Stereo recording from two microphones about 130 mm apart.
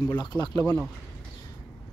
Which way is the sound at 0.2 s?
35° left (ahead or behind).